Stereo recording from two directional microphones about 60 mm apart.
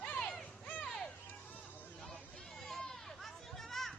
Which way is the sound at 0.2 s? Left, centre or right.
Centre.